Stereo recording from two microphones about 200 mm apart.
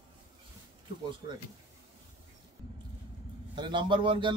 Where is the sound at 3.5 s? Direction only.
25° right (ahead or behind).